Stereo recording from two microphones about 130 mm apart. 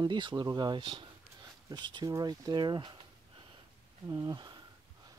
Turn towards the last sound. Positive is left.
turn(degrees=-25)  # may be behind; listen again after turning